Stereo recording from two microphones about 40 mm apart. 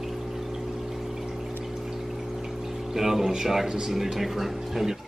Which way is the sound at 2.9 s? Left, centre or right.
Centre.